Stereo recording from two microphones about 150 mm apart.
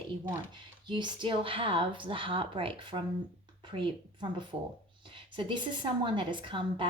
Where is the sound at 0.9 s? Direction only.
30° right (ahead or behind).